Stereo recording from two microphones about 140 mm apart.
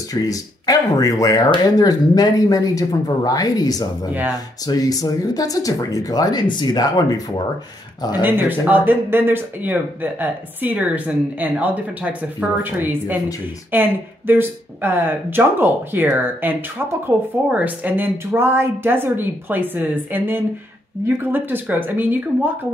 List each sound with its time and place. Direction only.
0.1 s speech: 25° left (ahead or behind)
8.2 s a woman's voice: 15° right (ahead or behind)